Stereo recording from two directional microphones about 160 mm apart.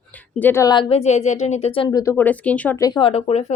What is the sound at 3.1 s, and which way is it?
Speech, 40° left (ahead or behind).